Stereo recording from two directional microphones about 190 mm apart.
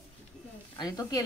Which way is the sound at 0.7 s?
20° left (ahead or behind).